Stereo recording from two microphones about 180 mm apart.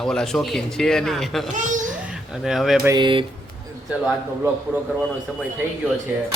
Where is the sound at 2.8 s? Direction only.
20° right (ahead or behind).